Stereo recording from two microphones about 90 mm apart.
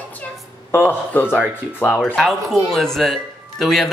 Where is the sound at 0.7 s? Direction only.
20° left (ahead or behind).